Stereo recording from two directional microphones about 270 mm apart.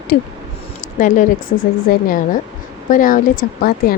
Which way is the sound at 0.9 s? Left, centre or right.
Left.